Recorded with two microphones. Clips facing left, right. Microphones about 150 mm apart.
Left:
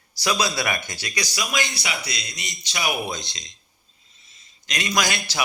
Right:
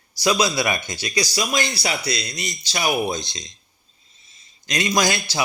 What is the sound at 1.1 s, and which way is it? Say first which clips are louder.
Speech: right 5 dB; 30° right (ahead or behind).